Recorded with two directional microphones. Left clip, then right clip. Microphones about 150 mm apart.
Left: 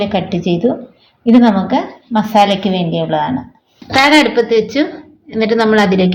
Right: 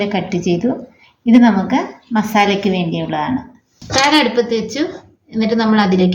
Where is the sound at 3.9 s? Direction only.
50° left (ahead or behind).